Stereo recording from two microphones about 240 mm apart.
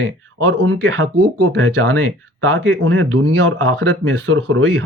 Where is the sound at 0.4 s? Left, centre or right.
Right.